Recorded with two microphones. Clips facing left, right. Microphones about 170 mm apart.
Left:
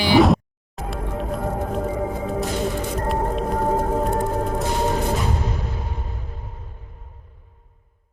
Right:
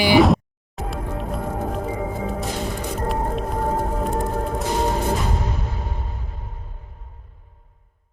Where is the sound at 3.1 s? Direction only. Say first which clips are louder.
Left 2 dB; centre (ahead or behind).